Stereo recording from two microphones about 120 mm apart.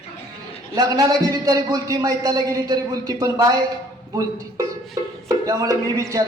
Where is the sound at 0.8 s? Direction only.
30° right (ahead or behind).